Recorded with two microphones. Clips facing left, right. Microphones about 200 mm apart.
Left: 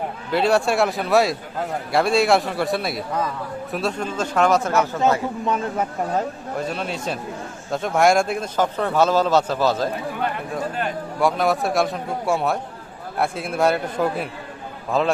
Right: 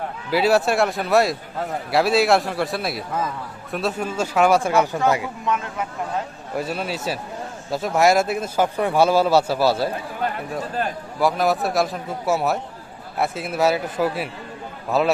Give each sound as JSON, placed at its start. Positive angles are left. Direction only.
{"t": 0.3, "sound": "a man's voice", "side_deg": -5}
{"t": 5.5, "sound": "speech", "side_deg": 35}
{"t": 6.6, "sound": "a man's voice", "side_deg": -5}
{"t": 11.2, "sound": "a man's voice", "side_deg": 0}
{"t": 14.9, "sound": "a man's voice", "side_deg": -5}